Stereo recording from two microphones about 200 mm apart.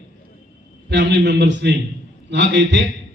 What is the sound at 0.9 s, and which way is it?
A man's voice, 60° right (ahead or behind).